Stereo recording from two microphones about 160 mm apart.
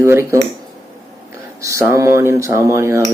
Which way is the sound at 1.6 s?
20° right (ahead or behind).